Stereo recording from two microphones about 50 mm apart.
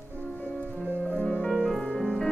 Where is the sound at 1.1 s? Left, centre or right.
Centre.